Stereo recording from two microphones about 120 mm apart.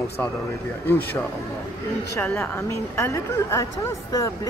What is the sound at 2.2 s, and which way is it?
A woman's voice, 20° left (ahead or behind).